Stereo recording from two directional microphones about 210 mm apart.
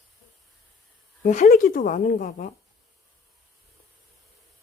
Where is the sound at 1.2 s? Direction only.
35° left (ahead or behind).